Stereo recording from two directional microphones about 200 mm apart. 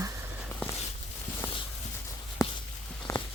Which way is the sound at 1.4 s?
15° left (ahead or behind).